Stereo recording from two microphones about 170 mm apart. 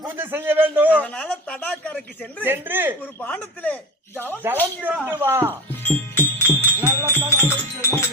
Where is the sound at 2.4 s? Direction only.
10° right (ahead or behind).